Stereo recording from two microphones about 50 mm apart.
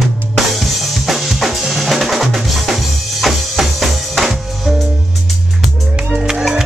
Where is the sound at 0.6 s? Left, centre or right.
Centre.